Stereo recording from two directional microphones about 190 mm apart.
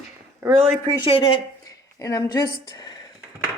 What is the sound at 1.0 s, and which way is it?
Speech, 25° left (ahead or behind).